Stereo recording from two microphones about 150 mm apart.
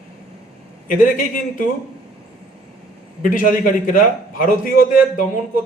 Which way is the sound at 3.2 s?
65° left (ahead or behind).